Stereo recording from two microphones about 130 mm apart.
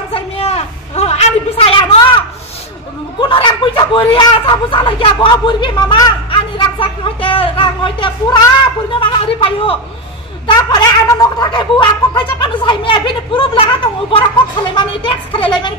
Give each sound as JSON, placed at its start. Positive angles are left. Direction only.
{"t": 0.1, "sound": "a sound", "side_deg": 55}
{"t": 3.2, "sound": "speech", "side_deg": 40}
{"t": 10.4, "sound": "speech", "side_deg": 35}